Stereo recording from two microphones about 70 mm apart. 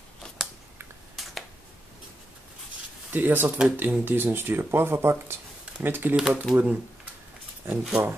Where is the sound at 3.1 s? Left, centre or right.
Right.